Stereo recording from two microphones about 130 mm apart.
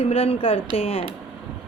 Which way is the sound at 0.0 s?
50° left (ahead or behind).